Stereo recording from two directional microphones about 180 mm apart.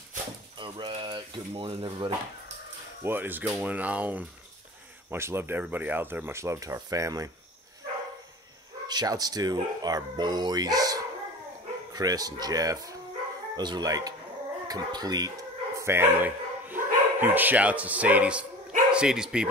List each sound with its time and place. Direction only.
0.6 s speech: 25° right (ahead or behind)
3.0 s speech: 10° right (ahead or behind)
8.8 s speech: 20° right (ahead or behind); by 19.5 s 5° right (ahead or behind)